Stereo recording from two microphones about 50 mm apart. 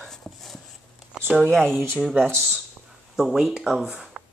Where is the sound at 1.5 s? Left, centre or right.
Right.